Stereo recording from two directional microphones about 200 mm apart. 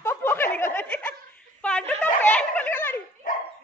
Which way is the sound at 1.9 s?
10° left (ahead or behind).